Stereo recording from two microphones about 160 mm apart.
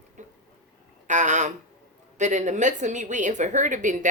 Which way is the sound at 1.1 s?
50° right (ahead or behind).